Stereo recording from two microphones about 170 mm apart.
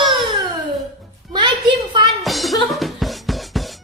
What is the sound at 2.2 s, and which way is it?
Music, centre (ahead or behind).